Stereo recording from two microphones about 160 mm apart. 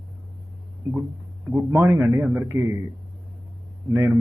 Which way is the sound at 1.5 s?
15° right (ahead or behind).